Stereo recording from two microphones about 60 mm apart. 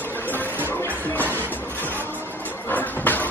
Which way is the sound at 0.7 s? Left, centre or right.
Left.